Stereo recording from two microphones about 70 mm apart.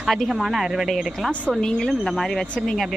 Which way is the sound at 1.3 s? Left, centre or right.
Centre.